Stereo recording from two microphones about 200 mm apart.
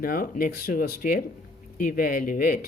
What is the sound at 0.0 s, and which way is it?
Speech, 45° left (ahead or behind).